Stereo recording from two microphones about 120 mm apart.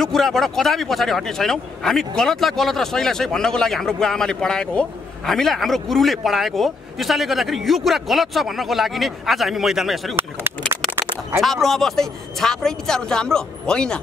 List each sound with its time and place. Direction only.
0.0 s speech: centre (ahead or behind)
11.0 s a sound: 20° right (ahead or behind)
11.4 s speech: centre (ahead or behind)